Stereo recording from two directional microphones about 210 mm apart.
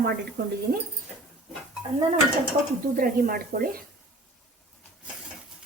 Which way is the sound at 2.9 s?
40° right (ahead or behind).